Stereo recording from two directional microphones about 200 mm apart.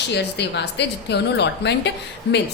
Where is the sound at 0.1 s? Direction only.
60° left (ahead or behind).